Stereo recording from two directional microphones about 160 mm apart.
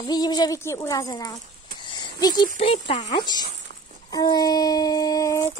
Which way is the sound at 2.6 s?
40° left (ahead or behind).